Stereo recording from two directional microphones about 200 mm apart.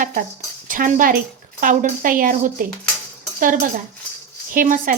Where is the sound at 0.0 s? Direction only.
45° right (ahead or behind).